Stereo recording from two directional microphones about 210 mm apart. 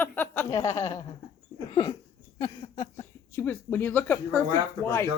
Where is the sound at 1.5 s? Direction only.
20° left (ahead or behind).